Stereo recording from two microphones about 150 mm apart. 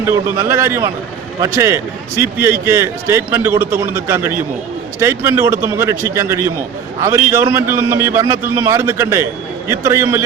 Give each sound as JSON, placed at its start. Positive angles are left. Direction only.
{"t": 0.0, "sound": "a man's voice", "side_deg": -15}